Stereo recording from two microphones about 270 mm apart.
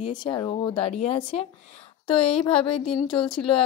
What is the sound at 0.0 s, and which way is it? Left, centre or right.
Speech, centre.